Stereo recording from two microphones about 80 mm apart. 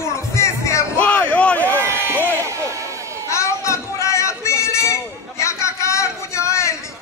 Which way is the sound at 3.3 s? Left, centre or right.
Left.